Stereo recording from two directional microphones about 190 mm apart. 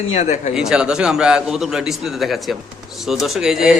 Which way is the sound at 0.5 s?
5° right (ahead or behind).